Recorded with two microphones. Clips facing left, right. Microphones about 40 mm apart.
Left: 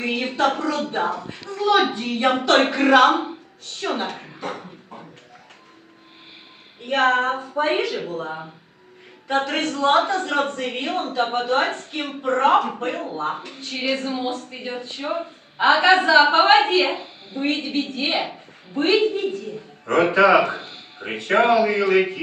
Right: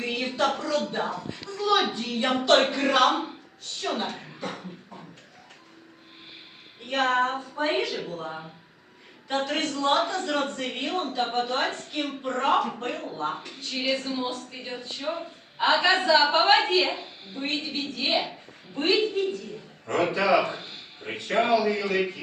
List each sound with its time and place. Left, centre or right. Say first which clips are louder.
0.0 s a woman's voice: left 5 dB; left
6.8 s a woman's voice: left 5 dB; left
9.3 s a woman's voice: left 5 dB; left
20.5 s speech: left 6 dB; left
21.0 s a woman's voice: left 7 dB; left